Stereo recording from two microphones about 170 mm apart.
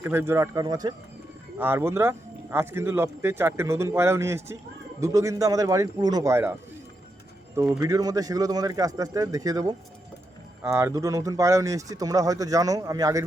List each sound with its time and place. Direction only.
0.0 s speech: 15° right (ahead or behind)